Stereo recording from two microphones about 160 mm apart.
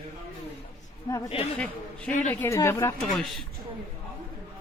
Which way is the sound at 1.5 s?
10° left (ahead or behind).